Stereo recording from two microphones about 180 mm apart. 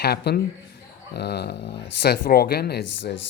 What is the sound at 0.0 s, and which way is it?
Speech, 65° left (ahead or behind).